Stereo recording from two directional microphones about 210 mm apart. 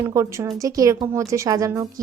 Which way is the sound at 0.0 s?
15° right (ahead or behind).